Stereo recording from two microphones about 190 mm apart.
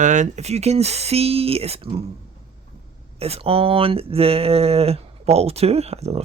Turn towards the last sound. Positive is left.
turn(degrees=-35)  # may be behind; listen again after turning